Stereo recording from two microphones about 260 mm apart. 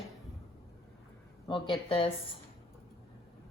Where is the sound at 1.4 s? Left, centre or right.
Centre.